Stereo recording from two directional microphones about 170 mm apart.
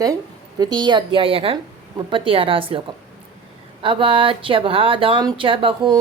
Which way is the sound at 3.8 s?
30° right (ahead or behind).